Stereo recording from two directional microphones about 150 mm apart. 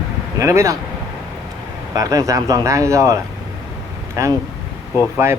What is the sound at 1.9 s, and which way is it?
Speech, 25° right (ahead or behind).